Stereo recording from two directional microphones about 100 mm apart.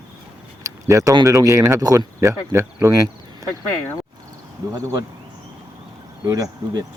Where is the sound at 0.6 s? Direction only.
30° right (ahead or behind).